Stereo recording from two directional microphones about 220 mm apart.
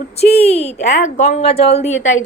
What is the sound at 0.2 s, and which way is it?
A woman's voice, 30° left (ahead or behind).